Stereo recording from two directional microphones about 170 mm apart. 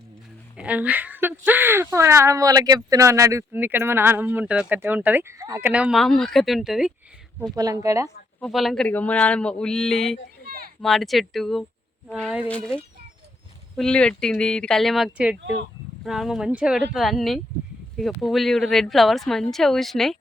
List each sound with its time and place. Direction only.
0.5 s speech: 10° right (ahead or behind)
7.5 s speech: 20° right (ahead or behind)
8.4 s speech: centre (ahead or behind)